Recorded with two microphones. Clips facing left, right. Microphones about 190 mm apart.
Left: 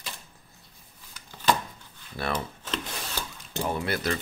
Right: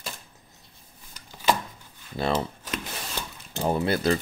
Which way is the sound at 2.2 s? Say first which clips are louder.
Right 5 dB; 25° right (ahead or behind).